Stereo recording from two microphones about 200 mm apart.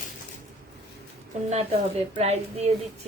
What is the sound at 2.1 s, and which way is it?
Speech, 30° right (ahead or behind).